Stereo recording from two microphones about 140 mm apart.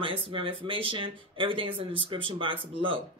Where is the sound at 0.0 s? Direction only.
40° right (ahead or behind).